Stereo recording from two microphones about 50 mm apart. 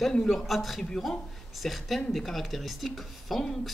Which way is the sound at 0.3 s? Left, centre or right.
Centre.